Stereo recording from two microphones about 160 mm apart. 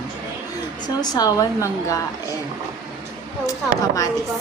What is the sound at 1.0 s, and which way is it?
A woman's voice, 25° left (ahead or behind).